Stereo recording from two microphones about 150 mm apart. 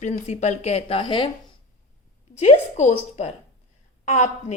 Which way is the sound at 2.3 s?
50° left (ahead or behind).